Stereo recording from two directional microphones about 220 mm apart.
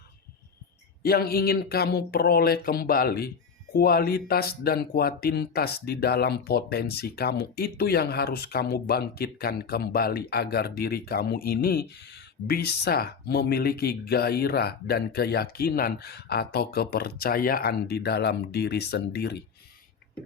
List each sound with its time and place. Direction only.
1.0 s speech: 45° left (ahead or behind)